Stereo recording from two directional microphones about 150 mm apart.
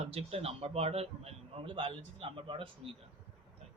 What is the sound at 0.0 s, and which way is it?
A man's voice, 40° right (ahead or behind).